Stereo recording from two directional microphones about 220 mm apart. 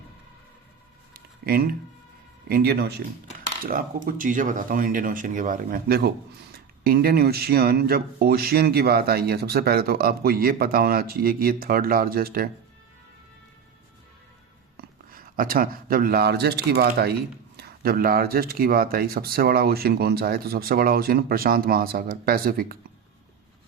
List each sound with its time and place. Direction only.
1.1 s a sound: 45° right (ahead or behind)
2.5 s speech: 45° right (ahead or behind)
14.8 s speech: 40° right (ahead or behind)